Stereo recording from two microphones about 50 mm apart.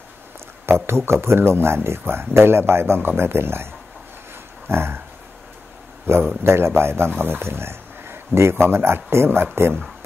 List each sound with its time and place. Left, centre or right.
0.7 s speech: right
4.6 s speech: right
6.1 s speech: right